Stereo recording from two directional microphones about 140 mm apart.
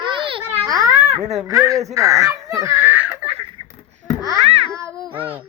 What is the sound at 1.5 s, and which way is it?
Speech, 25° right (ahead or behind).